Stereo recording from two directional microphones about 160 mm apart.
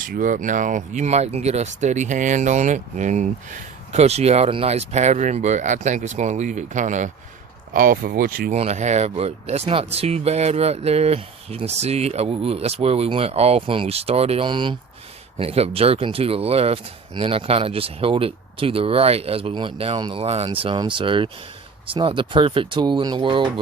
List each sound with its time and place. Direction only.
0.0 s speech: 60° right (ahead or behind)
7.7 s speech: 60° right (ahead or behind)
8.5 s speech: 45° right (ahead or behind)